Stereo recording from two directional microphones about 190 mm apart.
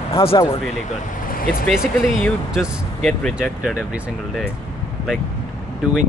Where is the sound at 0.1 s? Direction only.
30° left (ahead or behind).